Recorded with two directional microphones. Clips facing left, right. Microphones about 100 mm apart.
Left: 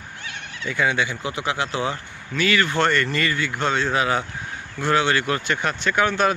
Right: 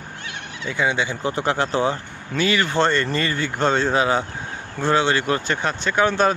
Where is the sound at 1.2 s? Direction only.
40° right (ahead or behind).